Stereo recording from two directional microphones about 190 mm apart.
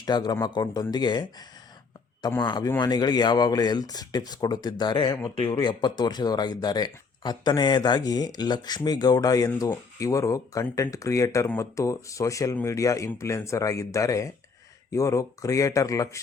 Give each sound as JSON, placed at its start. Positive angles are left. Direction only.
{"t": 0.0, "sound": "speech", "side_deg": 20}